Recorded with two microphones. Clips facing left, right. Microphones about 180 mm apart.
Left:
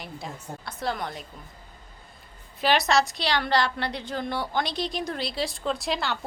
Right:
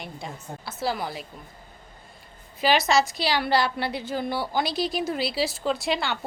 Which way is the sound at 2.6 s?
Centre (ahead or behind).